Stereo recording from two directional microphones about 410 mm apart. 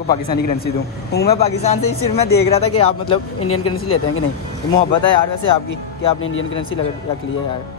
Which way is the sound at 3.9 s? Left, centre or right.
Left.